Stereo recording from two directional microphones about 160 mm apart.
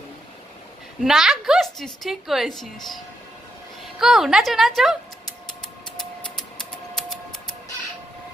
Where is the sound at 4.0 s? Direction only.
5° right (ahead or behind).